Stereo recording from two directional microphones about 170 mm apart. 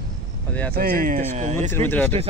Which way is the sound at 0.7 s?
60° right (ahead or behind).